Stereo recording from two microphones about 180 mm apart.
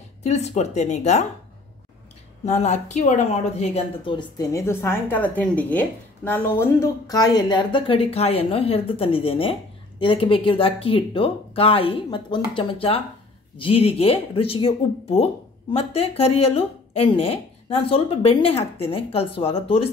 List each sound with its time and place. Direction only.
0.2 s speech: 35° left (ahead or behind)
2.4 s a woman's voice: 40° left (ahead or behind)